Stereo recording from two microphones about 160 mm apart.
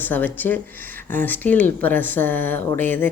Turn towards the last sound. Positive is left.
turn(degrees=10)  # may be behind; listen again after turning